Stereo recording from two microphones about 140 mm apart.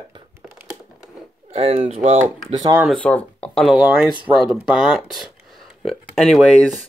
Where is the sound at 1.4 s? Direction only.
45° right (ahead or behind).